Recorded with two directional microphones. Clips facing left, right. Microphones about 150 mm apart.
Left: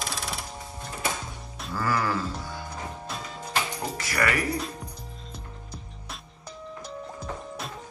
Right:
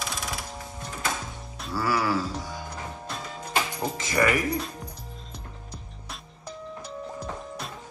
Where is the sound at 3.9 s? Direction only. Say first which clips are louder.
Right 3 dB; 20° right (ahead or behind).